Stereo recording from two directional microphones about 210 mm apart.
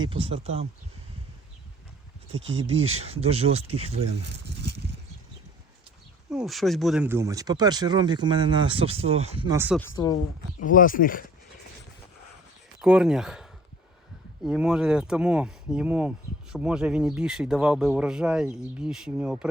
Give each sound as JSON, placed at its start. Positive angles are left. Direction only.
{"t": 0.0, "sound": "speech", "side_deg": -25}
{"t": 2.3, "sound": "speech", "side_deg": -65}
{"t": 2.8, "sound": "speech", "side_deg": -30}
{"t": 4.4, "sound": "a sound", "side_deg": -55}
{"t": 6.3, "sound": "speech", "side_deg": 0}
{"t": 9.5, "sound": "speech", "side_deg": -10}
{"t": 9.9, "sound": "speech", "side_deg": 20}
{"t": 10.6, "sound": "speech", "side_deg": 40}
{"t": 12.8, "sound": "speech", "side_deg": -5}